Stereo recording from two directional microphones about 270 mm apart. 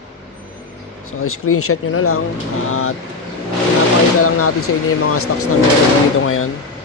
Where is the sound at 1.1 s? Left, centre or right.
Left.